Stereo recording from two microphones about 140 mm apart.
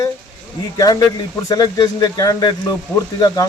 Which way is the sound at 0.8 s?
25° left (ahead or behind).